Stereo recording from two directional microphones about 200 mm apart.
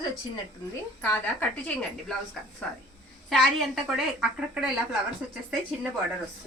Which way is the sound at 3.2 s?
Centre (ahead or behind).